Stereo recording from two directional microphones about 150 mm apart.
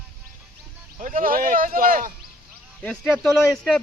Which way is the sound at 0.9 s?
65° right (ahead or behind).